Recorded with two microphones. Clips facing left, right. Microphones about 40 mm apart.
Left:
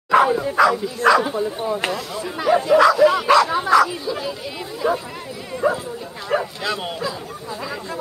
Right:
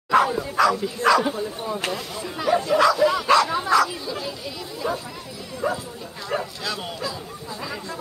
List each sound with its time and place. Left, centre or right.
0.1 s speech: centre
5.6 s bow-wow: centre
6.2 s speech: left